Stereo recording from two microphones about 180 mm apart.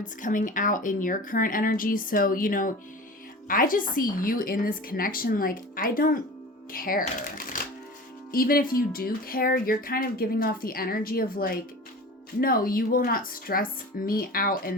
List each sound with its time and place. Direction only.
0.0 s speech: 45° left (ahead or behind)